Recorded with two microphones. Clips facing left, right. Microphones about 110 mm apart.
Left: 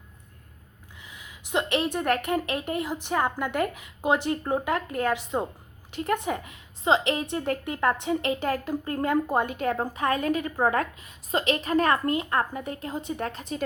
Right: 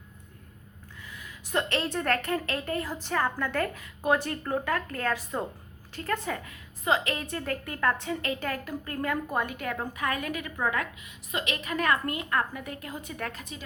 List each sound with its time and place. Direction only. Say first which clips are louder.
1.0 s a woman's voice: right 1 dB; 20° left (ahead or behind)